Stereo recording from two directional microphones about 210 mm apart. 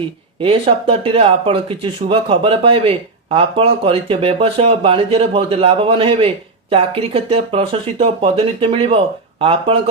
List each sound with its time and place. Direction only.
0.4 s speech: 25° right (ahead or behind)